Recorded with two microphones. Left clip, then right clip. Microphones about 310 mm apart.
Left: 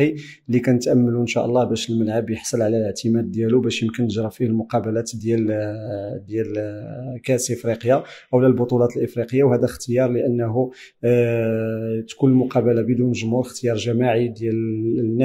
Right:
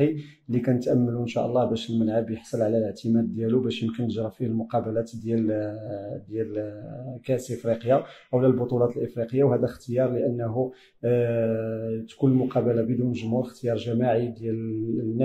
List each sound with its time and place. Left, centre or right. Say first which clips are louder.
0.0 s speech: left 4 dB; left